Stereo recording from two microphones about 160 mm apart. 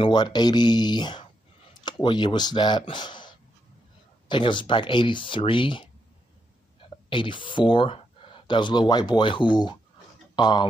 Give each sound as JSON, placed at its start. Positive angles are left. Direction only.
{"t": 0.0, "sound": "speech", "side_deg": 25}
{"t": 7.1, "sound": "speech", "side_deg": 30}